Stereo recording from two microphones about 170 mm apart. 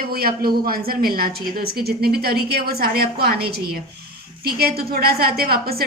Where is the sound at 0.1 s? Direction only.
65° right (ahead or behind).